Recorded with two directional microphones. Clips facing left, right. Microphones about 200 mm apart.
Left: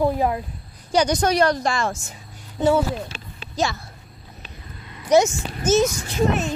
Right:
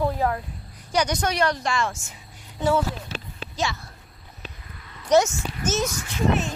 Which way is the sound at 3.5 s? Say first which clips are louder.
Left 4 dB; 40° left (ahead or behind).